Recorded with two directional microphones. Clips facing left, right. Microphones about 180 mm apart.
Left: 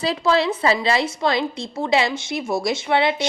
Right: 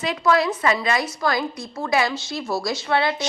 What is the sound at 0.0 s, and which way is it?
A woman's voice, 30° left (ahead or behind).